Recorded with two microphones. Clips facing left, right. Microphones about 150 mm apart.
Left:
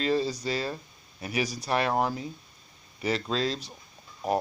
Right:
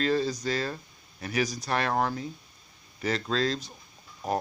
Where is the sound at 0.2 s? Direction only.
30° left (ahead or behind).